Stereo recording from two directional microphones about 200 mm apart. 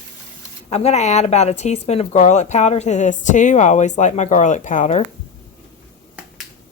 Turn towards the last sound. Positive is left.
turn(degrees=35)  # may be behind; listen again after turning